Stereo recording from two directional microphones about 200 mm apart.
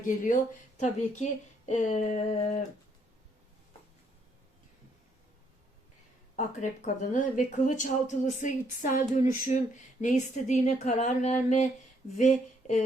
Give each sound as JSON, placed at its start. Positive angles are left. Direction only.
{"t": 0.0, "sound": "speech", "side_deg": 40}
{"t": 6.3, "sound": "speech", "side_deg": 40}
{"t": 12.1, "sound": "a sound", "side_deg": 35}